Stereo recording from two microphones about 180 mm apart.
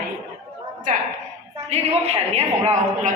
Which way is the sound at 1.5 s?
35° right (ahead or behind).